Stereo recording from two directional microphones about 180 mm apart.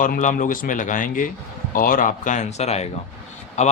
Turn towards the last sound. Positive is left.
turn(degrees=40)  # may be behind; listen again after turning